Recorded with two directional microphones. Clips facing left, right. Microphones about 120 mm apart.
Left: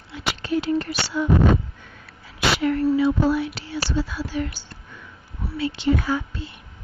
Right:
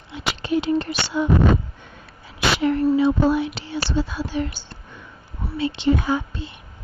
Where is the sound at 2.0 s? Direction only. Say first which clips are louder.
Even; 25° right (ahead or behind).